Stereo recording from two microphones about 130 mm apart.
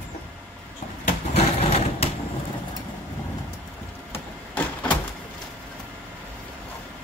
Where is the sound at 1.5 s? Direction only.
50° left (ahead or behind).